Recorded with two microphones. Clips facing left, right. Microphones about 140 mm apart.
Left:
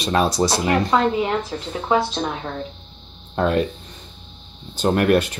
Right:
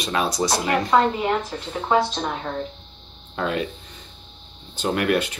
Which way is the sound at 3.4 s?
45° left (ahead or behind).